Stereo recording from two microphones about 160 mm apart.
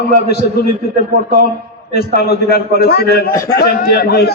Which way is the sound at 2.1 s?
75° left (ahead or behind).